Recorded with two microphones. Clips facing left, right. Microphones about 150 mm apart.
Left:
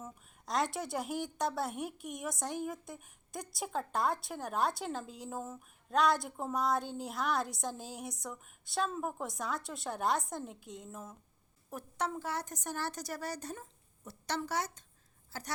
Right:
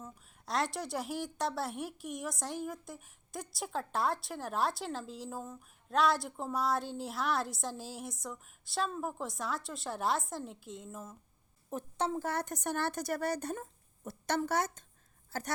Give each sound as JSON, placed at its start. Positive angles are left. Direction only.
{"t": 0.0, "sound": "a woman's voice", "side_deg": 0}
{"t": 11.7, "sound": "a woman's voice", "side_deg": -25}
{"t": 12.2, "sound": "a woman's voice", "side_deg": -55}